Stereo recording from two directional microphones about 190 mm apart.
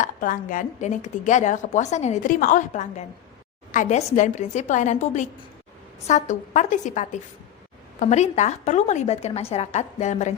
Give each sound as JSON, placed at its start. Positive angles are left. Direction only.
{"t": 0.0, "sound": "a woman's voice", "side_deg": 45}